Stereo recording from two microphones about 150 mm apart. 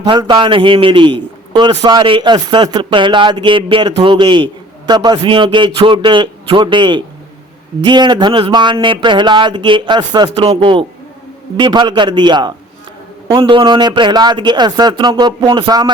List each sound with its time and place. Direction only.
0.0 s speech: 30° right (ahead or behind)